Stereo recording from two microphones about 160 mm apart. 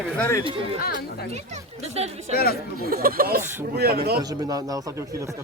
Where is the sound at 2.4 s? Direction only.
70° left (ahead or behind).